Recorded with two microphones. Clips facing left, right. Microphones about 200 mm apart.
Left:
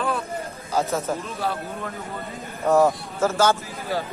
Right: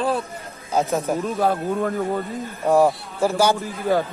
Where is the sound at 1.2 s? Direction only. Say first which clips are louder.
Right 7 dB; 50° right (ahead or behind).